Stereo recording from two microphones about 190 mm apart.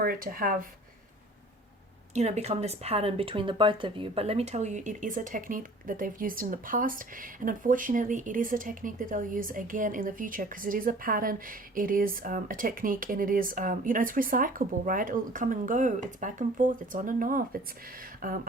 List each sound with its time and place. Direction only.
0.0 s speech: 50° right (ahead or behind)
2.1 s speech: 35° right (ahead or behind)